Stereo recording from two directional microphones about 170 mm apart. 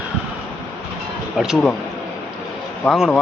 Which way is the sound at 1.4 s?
5° right (ahead or behind).